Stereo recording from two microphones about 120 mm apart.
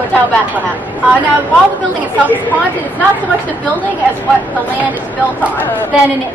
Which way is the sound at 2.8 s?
15° left (ahead or behind).